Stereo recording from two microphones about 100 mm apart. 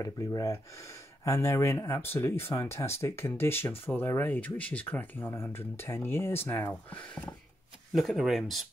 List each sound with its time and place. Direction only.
0.0 s speech: 35° left (ahead or behind); by 5.3 s 15° left (ahead or behind)
5.3 s speech: 25° left (ahead or behind)
7.9 s speech: centre (ahead or behind)